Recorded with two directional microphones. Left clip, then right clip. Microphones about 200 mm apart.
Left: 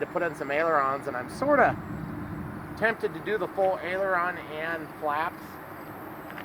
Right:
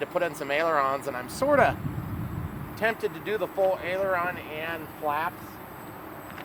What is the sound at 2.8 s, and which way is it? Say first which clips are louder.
Speech: even; 40° right (ahead or behind).